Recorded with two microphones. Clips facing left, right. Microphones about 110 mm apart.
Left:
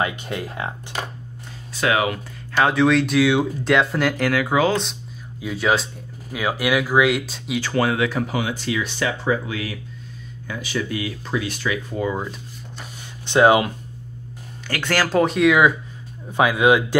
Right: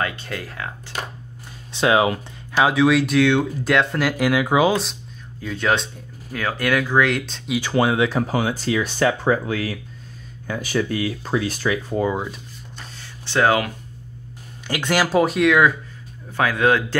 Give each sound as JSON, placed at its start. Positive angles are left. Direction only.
{"t": 0.0, "sound": "speech", "side_deg": 20}
{"t": 1.7, "sound": "speech", "side_deg": -25}
{"t": 2.5, "sound": "speech", "side_deg": -5}
{"t": 4.2, "sound": "speech", "side_deg": -15}
{"t": 5.4, "sound": "speech", "side_deg": 5}
{"t": 7.6, "sound": "speech", "side_deg": -20}
{"t": 12.7, "sound": "a sound", "side_deg": 15}
{"t": 14.7, "sound": "speech", "side_deg": -15}
{"t": 16.3, "sound": "speech", "side_deg": 15}